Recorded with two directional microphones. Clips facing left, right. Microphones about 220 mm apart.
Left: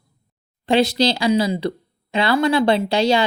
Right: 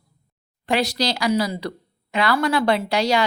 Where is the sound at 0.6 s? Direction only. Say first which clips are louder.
Left 5 dB; 25° left (ahead or behind).